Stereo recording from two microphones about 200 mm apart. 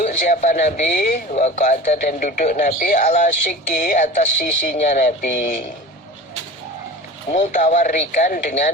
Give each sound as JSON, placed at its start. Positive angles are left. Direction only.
{"t": 0.0, "sound": "speech", "side_deg": 35}
{"t": 7.3, "sound": "speech", "side_deg": 40}